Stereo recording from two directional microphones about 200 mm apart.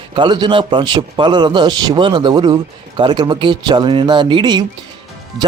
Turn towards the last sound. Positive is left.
turn(degrees=-25)  # may be behind; listen again after turning